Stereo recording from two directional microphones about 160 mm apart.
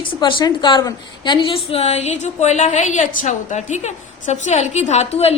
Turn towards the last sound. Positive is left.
turn(degrees=40)  # may be behind; listen again after turning